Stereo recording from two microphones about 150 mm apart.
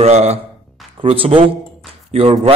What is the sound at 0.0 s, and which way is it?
A man's voice, 45° right (ahead or behind).